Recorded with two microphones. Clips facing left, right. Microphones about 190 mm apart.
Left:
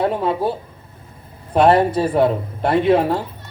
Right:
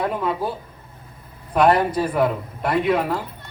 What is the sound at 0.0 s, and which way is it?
Speech, 30° left (ahead or behind).